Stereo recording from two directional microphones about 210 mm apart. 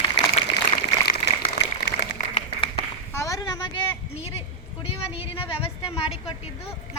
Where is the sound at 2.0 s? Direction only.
25° left (ahead or behind).